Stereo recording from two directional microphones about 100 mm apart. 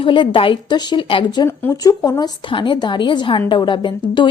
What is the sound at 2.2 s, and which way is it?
A woman's voice, 55° left (ahead or behind).